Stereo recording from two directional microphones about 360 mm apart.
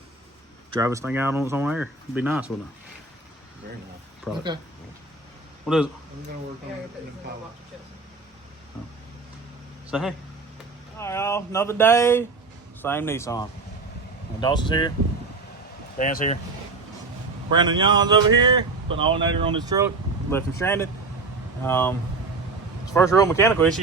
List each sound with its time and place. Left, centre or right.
0.7 s speech: centre
5.6 s speech: centre
9.9 s speech: centre
16.0 s speech: left
17.5 s speech: centre
20.3 s speech: centre
23.0 s speech: centre